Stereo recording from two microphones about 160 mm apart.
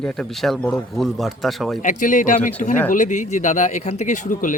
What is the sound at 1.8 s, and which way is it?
Speech, 55° left (ahead or behind).